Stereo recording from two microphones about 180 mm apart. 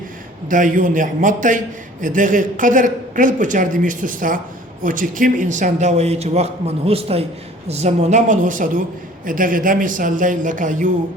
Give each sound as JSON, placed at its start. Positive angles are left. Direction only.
{"t": 0.4, "sound": "a man's voice", "side_deg": -45}